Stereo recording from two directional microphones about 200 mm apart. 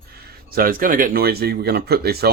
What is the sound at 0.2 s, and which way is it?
Speech, 50° right (ahead or behind).